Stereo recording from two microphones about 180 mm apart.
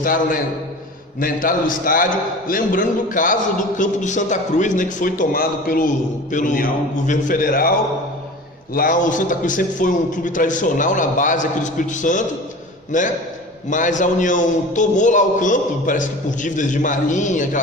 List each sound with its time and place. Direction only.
0.0 s a man's voice: 50° left (ahead or behind)
8.7 s a man's voice: 50° left (ahead or behind)